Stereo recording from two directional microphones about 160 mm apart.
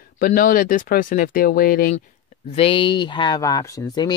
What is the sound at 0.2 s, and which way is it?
Speech, 65° left (ahead or behind).